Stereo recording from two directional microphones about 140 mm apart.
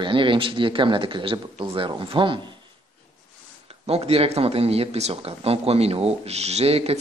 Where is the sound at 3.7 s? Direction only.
45° right (ahead or behind).